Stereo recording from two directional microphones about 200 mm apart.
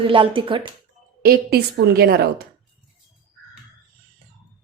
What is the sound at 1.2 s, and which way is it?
A woman's voice, 50° right (ahead or behind).